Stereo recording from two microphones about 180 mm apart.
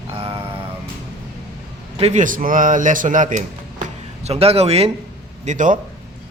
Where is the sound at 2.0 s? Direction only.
40° right (ahead or behind).